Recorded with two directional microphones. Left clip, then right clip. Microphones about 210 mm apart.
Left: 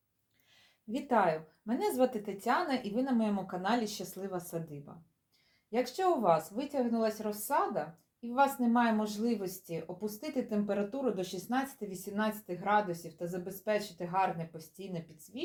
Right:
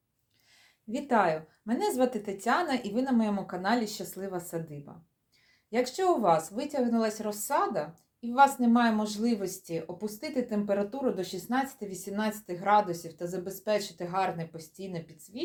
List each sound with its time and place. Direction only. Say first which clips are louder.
0.9 s speech: right 3 dB; 15° right (ahead or behind)
5.7 s speech: right 3 dB; 20° right (ahead or behind)